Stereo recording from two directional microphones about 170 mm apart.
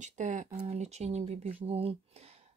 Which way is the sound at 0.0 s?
45° right (ahead or behind).